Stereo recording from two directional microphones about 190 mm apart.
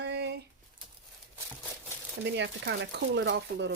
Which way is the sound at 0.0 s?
65° right (ahead or behind).